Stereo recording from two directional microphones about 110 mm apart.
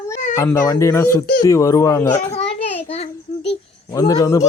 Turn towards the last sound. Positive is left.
turn(degrees=30)  # may be behind; listen again after turning